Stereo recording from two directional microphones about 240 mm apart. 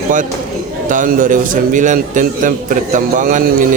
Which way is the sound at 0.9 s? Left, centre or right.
Right.